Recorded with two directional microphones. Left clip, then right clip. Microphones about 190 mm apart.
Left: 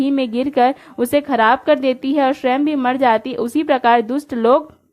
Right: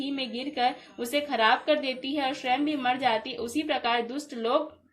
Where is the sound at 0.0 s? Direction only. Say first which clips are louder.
Left 14 dB; 50° left (ahead or behind).